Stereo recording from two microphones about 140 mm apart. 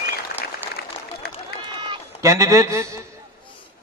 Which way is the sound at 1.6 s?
35° right (ahead or behind).